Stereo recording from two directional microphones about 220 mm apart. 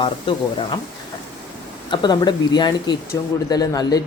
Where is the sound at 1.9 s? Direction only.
20° left (ahead or behind).